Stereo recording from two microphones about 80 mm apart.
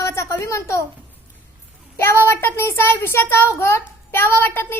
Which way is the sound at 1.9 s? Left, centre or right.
Left.